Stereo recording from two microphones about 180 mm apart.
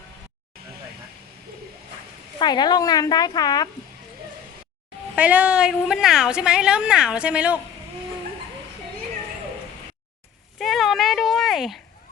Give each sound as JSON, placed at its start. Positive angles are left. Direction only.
{"t": 2.4, "sound": "speech", "side_deg": 25}
{"t": 5.1, "sound": "a woman's voice", "side_deg": -10}
{"t": 10.6, "sound": "speech", "side_deg": 0}